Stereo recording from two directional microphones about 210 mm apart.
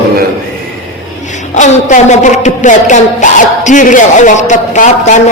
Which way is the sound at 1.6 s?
35° left (ahead or behind).